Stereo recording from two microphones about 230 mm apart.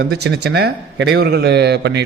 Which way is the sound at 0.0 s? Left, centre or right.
Right.